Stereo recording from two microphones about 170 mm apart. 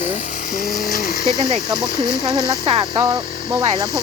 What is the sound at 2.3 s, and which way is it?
Speech, 20° right (ahead or behind).